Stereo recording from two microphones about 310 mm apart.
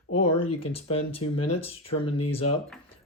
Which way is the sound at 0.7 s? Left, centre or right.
Centre.